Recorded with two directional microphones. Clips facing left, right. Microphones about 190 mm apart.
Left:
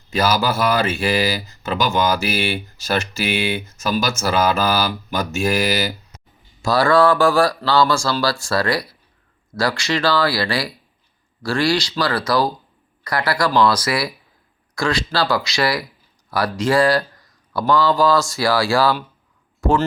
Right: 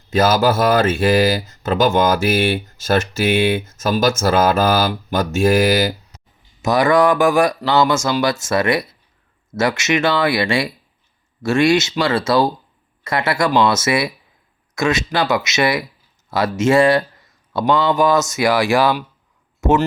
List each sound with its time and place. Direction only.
0.1 s speech: 45° right (ahead or behind)
6.6 s speech: 20° right (ahead or behind)